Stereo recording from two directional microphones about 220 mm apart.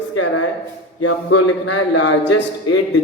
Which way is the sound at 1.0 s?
85° left.